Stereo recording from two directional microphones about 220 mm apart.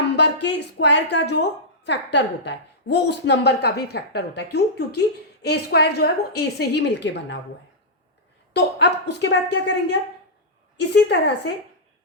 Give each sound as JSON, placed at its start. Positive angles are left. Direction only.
{"t": 0.2, "sound": "a woman's voice", "side_deg": 50}
{"t": 8.5, "sound": "a woman's voice", "side_deg": 50}